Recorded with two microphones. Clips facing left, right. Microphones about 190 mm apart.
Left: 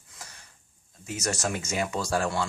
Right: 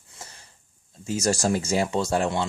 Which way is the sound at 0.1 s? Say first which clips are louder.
Right 3 dB; 25° right (ahead or behind).